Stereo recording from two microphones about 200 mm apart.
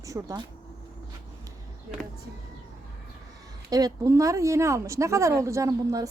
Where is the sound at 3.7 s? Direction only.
15° right (ahead or behind).